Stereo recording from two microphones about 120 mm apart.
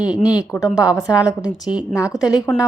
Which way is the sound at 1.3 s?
30° left (ahead or behind).